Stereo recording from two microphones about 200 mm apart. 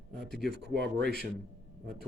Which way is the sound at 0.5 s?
55° right (ahead or behind).